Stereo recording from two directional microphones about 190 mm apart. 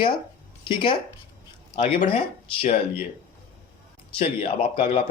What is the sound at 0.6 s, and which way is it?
Speech, 25° left (ahead or behind).